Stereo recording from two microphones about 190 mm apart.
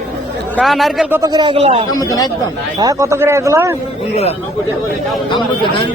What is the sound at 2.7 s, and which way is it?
A man's voice, 20° right (ahead or behind).